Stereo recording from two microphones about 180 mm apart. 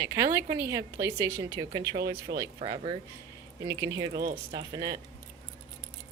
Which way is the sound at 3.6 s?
15° right (ahead or behind).